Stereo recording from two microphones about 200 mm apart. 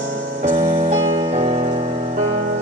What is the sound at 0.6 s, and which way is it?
Music, 30° right (ahead or behind).